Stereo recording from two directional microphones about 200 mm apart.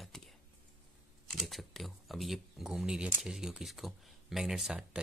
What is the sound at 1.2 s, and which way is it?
Speech, centre (ahead or behind).